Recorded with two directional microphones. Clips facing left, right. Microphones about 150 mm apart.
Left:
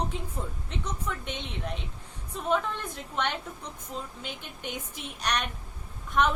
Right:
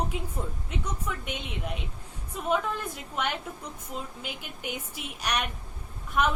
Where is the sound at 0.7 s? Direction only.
10° right (ahead or behind).